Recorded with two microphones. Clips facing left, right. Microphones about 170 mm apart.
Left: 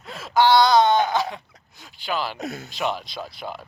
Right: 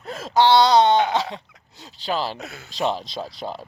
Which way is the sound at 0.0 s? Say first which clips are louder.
Right 5 dB; 40° right (ahead or behind).